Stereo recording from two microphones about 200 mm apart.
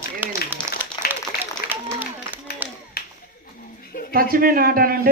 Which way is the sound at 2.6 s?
10° right (ahead or behind).